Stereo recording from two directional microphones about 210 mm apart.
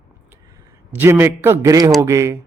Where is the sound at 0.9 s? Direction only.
10° right (ahead or behind).